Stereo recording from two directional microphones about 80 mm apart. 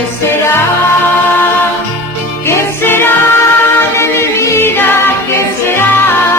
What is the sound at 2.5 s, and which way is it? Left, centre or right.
Music, left.